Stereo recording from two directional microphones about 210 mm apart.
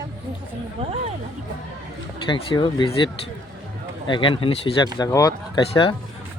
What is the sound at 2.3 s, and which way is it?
Speech, 20° left (ahead or behind).